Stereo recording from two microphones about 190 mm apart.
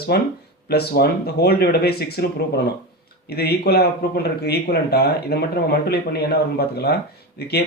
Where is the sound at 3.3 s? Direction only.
55° left (ahead or behind).